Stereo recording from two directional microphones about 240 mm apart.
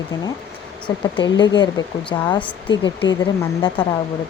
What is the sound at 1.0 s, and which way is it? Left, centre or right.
Speech, centre.